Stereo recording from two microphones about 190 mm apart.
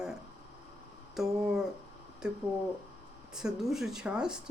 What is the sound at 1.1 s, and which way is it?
Speech, centre (ahead or behind).